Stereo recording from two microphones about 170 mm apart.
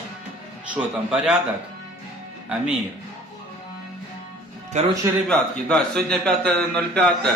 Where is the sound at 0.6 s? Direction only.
5° right (ahead or behind).